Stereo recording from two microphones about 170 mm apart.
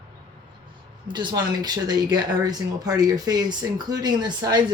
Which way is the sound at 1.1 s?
25° right (ahead or behind).